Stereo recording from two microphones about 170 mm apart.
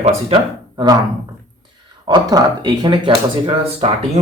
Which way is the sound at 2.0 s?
25° right (ahead or behind).